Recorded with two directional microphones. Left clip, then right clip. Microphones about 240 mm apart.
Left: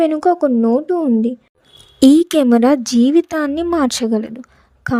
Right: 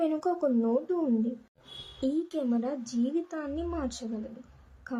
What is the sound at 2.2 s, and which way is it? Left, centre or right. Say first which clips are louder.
A woman's voice: left 19 dB; left.